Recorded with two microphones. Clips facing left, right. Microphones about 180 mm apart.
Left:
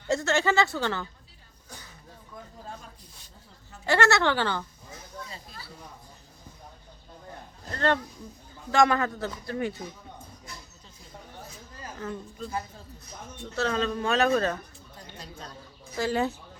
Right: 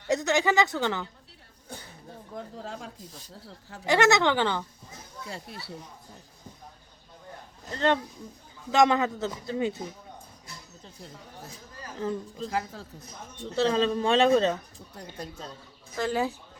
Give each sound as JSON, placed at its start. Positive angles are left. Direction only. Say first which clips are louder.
{"t": 0.1, "sound": "speech", "louder": "right 1 dB", "side_deg": -15}
{"t": 2.3, "sound": "speech", "louder": "right 5 dB", "side_deg": -80}
{"t": 3.8, "sound": "speech", "louder": "right 1 dB", "side_deg": -15}
{"t": 5.3, "sound": "speech", "louder": "right 5 dB", "side_deg": -75}
{"t": 7.7, "sound": "a man's voice", "louder": "right 1 dB", "side_deg": -15}
{"t": 12.5, "sound": "speech", "louder": "right 4 dB", "side_deg": -90}
{"t": 13.6, "sound": "a man's voice", "louder": "right 4 dB", "side_deg": -30}
{"t": 16.0, "sound": "speech", "louder": "left 1 dB", "side_deg": 0}